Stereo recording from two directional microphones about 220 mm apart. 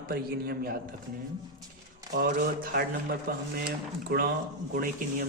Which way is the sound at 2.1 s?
40° right (ahead or behind).